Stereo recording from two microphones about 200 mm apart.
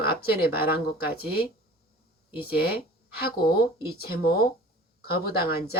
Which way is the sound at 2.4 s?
50° left (ahead or behind).